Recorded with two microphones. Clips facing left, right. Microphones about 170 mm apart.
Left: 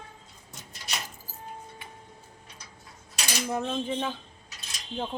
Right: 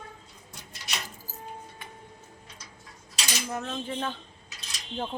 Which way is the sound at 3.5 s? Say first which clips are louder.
Left 5 dB; 15° left (ahead or behind).